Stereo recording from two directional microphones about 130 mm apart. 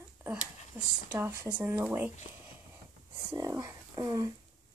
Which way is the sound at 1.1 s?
15° right (ahead or behind).